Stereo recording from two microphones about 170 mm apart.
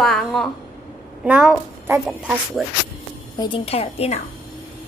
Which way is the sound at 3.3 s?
30° left (ahead or behind).